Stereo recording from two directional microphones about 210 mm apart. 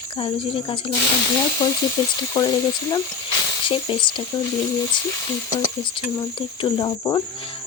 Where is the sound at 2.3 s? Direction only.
20° left (ahead or behind).